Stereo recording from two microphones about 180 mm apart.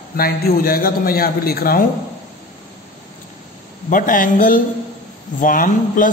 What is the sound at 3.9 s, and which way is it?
A man's voice, 50° left (ahead or behind).